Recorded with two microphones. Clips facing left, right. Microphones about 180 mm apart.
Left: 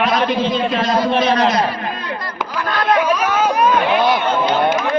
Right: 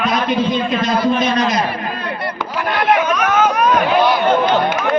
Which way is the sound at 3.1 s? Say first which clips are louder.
Right 1 dB; 30° left (ahead or behind).